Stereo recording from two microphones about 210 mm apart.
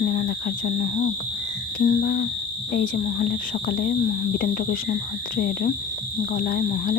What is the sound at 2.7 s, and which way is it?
Speech, 40° left (ahead or behind).